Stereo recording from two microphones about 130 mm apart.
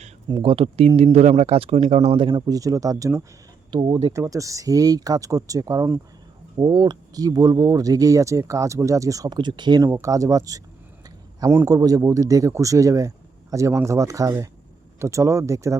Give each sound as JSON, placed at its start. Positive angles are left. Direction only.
{"t": 0.3, "sound": "speech", "side_deg": -40}
{"t": 2.5, "sound": "speech", "side_deg": -25}
{"t": 3.7, "sound": "speech", "side_deg": -40}
{"t": 4.1, "sound": "speech", "side_deg": -25}
{"t": 6.6, "sound": "speech", "side_deg": -35}